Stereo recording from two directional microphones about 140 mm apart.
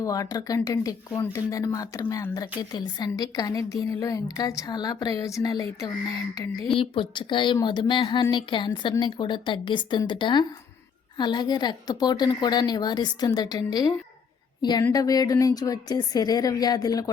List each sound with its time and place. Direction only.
0.0 s a woman's voice: 25° left (ahead or behind)